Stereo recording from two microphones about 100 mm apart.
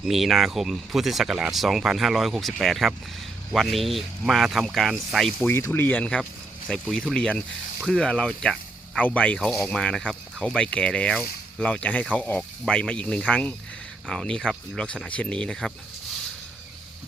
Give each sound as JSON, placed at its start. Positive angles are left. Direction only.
{"t": 0.0, "sound": "speech", "side_deg": 0}
{"t": 5.5, "sound": "speech", "side_deg": 25}
{"t": 6.7, "sound": "speech", "side_deg": 5}